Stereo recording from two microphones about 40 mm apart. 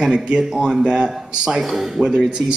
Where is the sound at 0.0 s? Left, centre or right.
Right.